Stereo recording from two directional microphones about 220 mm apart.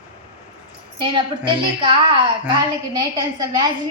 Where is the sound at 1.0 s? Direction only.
25° right (ahead or behind).